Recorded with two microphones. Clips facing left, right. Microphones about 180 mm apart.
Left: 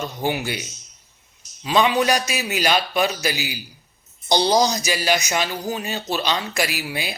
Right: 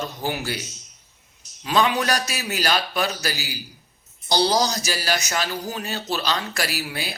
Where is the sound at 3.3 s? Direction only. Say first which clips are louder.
Left 4 dB; 40° right (ahead or behind).